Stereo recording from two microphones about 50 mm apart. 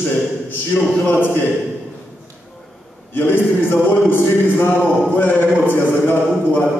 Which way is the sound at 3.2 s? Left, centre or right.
Left.